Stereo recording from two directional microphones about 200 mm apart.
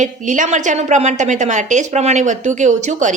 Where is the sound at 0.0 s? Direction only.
40° right (ahead or behind).